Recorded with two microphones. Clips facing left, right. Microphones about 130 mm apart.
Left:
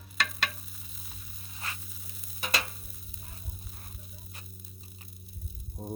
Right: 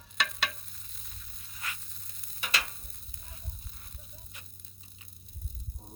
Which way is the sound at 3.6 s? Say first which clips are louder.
Left 4 dB; 5° left (ahead or behind).